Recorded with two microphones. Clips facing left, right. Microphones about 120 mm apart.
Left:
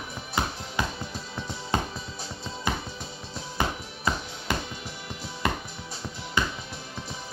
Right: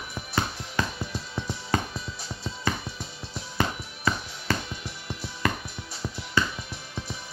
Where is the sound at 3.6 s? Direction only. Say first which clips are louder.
Right 1 dB; 15° left (ahead or behind).